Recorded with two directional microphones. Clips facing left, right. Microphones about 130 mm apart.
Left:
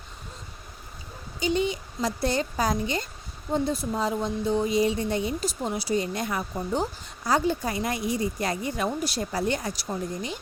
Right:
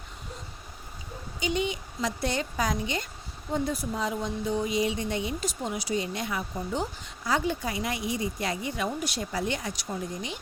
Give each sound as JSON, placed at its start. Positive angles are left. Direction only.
{"t": 1.4, "sound": "a woman's voice", "side_deg": 35}